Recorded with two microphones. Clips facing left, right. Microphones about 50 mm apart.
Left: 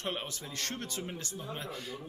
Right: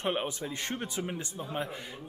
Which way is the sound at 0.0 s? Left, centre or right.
Right.